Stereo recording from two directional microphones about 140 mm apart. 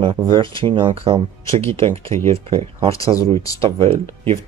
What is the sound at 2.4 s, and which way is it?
Speech, 40° right (ahead or behind).